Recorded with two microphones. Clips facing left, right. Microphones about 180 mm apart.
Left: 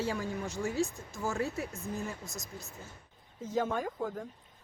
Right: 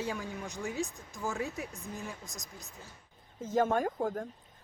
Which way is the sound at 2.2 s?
15° right (ahead or behind).